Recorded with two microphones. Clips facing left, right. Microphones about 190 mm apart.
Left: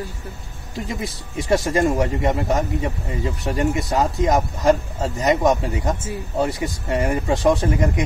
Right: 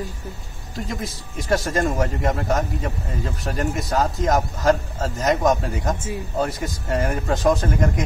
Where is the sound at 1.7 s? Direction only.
10° left (ahead or behind).